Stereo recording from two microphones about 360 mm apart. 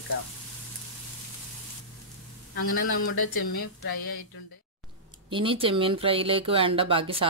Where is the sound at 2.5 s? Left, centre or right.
Left.